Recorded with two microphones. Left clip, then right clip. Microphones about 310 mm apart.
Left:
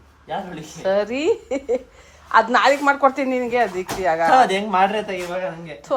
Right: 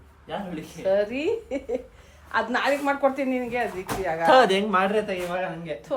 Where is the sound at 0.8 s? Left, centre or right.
Left.